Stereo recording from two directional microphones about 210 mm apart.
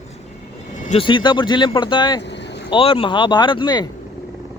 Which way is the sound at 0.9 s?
25° left (ahead or behind).